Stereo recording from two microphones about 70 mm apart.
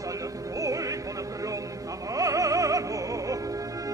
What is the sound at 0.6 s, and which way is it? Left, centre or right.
Music, right.